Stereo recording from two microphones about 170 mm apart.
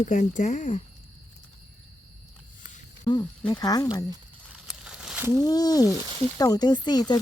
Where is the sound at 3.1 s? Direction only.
25° left (ahead or behind).